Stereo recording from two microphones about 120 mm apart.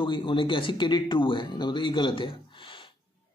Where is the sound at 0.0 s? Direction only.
45° left (ahead or behind).